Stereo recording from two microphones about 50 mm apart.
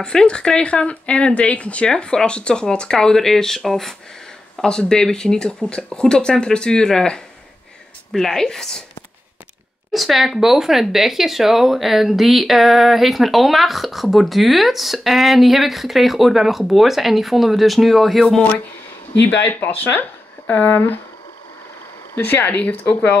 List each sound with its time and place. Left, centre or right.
0.0 s speech: centre
1.9 s speech: centre
9.9 s speech: centre
19.4 s speech: left
22.1 s speech: left